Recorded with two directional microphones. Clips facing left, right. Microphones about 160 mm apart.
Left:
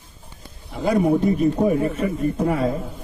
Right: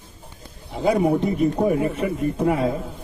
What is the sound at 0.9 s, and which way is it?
Speech, centre (ahead or behind).